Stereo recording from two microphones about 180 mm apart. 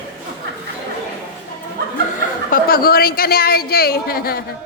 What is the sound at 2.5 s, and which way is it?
A woman's voice, 55° left (ahead or behind).